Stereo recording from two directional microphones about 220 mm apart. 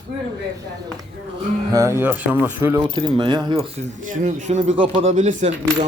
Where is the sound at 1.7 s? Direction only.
15° right (ahead or behind).